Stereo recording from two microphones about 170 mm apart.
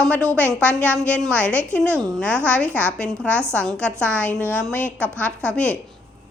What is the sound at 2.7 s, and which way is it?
A woman's voice, 15° right (ahead or behind).